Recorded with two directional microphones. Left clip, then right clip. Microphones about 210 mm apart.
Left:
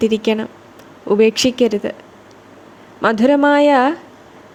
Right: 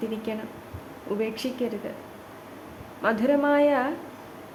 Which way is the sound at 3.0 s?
40° left (ahead or behind).